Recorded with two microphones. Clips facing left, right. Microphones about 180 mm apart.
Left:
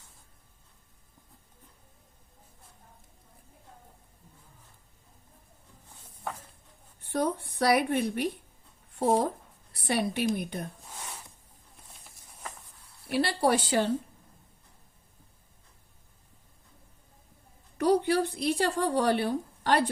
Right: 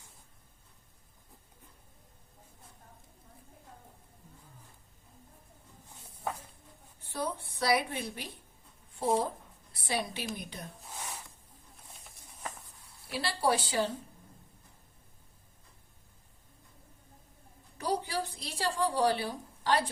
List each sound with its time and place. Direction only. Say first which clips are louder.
7.1 s a woman's voice: left 7 dB; 60° left (ahead or behind)
9.0 s speech: left 4 dB; 70° left (ahead or behind)
9.7 s a woman's voice: left 6 dB; 60° left (ahead or behind)
13.1 s a woman's voice: left 5 dB; 60° left (ahead or behind)
17.7 s a sound: left 9 dB; 65° left (ahead or behind)